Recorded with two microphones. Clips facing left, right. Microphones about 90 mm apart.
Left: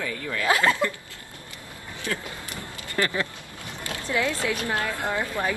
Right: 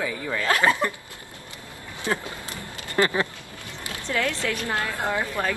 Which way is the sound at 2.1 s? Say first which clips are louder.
Right 4 dB; 30° right (ahead or behind).